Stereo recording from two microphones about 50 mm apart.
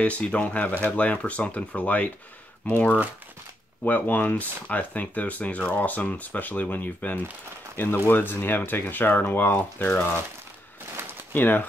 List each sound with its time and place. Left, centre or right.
0.0 s speech: left
11.3 s speech: left